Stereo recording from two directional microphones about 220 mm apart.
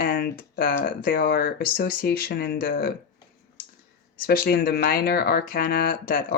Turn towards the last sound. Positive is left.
turn(degrees=40)  # may be behind; listen again after turning